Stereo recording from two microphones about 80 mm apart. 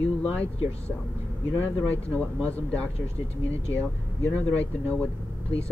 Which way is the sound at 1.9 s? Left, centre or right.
Centre.